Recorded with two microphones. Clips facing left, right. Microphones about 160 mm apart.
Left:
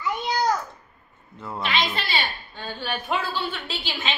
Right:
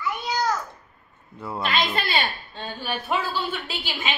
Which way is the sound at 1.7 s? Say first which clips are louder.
Right 1 dB; 50° right (ahead or behind).